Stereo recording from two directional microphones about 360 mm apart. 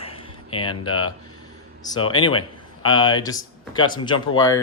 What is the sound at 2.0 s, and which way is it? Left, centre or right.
Speech, left.